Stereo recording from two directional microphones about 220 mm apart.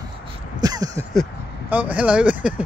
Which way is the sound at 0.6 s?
15° right (ahead or behind).